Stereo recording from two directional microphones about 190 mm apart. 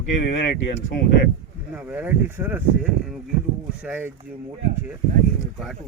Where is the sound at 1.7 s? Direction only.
5° right (ahead or behind).